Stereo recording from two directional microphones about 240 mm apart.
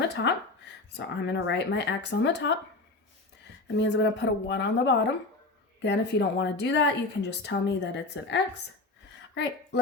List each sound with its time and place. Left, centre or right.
0.1 s speech: left
3.8 s speech: left